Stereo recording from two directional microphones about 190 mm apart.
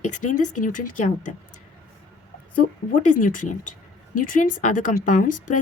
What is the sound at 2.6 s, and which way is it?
Speech, 45° left (ahead or behind).